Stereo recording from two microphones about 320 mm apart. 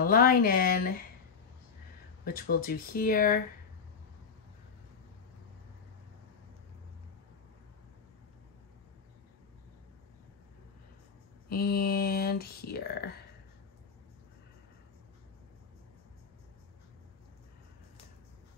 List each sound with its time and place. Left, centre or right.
0.0 s speech: left
2.2 s speech: left
11.4 s speech: left